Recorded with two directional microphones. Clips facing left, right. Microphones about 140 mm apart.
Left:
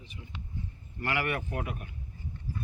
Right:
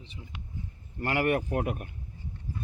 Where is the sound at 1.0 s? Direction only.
40° right (ahead or behind).